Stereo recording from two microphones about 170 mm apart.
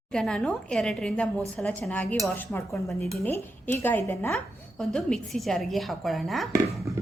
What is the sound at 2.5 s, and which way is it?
A woman's voice, 15° left (ahead or behind).